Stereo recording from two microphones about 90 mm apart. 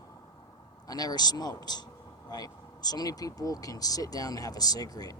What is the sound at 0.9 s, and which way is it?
Speech, 45° left (ahead or behind).